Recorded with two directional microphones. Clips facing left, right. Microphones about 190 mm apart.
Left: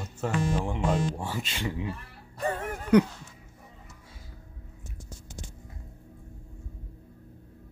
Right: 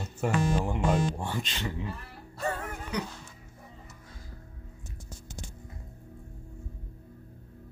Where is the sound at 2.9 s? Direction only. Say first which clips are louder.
Left 15 dB; 55° left (ahead or behind).